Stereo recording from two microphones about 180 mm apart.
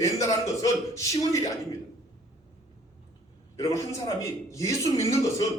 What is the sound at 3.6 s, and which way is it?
A man's voice, 15° left (ahead or behind).